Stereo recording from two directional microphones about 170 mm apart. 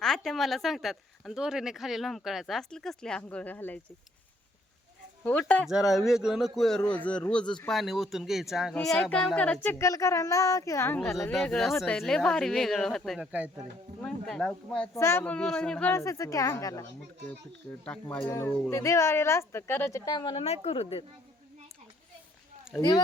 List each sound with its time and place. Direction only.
0.0 s speech: centre (ahead or behind)
5.2 s speech: 10° left (ahead or behind)
5.6 s speech: centre (ahead or behind); by 11.1 s 15° left (ahead or behind)
11.3 s speech: 5° left (ahead or behind)
14.9 s speech: 15° left (ahead or behind)
17.7 s speech: 5° left (ahead or behind); by 21.0 s 35° left (ahead or behind)
22.7 s speech: centre (ahead or behind)